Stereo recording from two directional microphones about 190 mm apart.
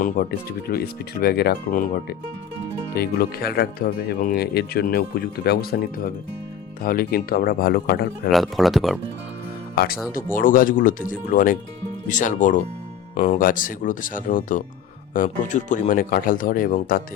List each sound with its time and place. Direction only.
0.0 s speech: 50° left (ahead or behind)
8.3 s speech: centre (ahead or behind)
9.7 s speech: 50° left (ahead or behind)
13.1 s speech: 30° left (ahead or behind)
13.4 s speech: 45° left (ahead or behind)